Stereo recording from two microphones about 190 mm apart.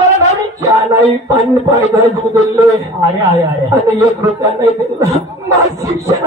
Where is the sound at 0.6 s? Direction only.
15° right (ahead or behind).